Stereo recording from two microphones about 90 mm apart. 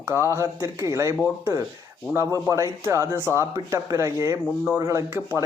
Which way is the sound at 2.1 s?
35° right (ahead or behind).